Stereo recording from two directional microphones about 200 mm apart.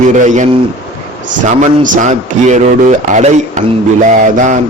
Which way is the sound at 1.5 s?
40° right (ahead or behind).